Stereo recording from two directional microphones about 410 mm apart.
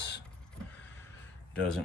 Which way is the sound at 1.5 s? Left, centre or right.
Centre.